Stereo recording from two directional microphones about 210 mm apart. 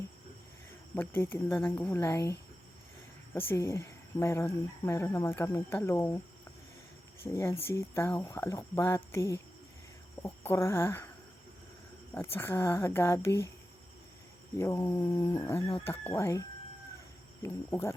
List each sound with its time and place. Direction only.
0.9 s speech: 10° left (ahead or behind)
3.3 s speech: 10° left (ahead or behind)
7.3 s speech: 10° left (ahead or behind)
12.1 s speech: 10° left (ahead or behind)
14.6 s speech: 15° left (ahead or behind)